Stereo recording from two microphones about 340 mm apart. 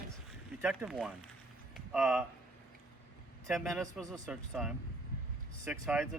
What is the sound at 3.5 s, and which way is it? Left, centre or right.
Speech, centre.